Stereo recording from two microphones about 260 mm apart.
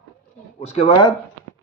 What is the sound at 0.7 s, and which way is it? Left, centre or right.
Speech, centre.